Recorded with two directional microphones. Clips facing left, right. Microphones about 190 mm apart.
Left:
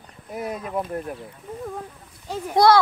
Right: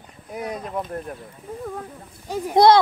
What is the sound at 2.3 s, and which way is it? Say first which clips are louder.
Speech: right 2 dB; 20° right (ahead or behind).